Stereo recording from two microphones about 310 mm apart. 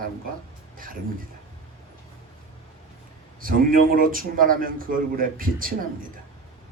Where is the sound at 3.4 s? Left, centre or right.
Right.